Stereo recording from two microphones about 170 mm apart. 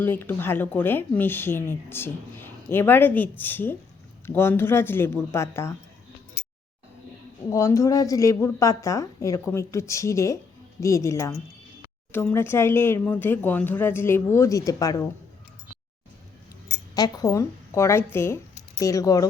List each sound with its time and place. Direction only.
0.0 s speech: 10° left (ahead or behind)
7.5 s speech: 20° left (ahead or behind)
16.9 s speech: 20° left (ahead or behind)